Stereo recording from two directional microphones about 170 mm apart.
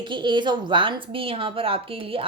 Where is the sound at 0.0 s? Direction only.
30° right (ahead or behind).